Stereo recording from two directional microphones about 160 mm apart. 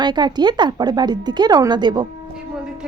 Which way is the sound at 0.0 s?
25° right (ahead or behind).